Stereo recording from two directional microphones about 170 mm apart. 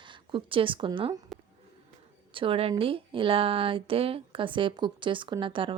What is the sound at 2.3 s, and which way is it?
A woman's voice, 35° right (ahead or behind).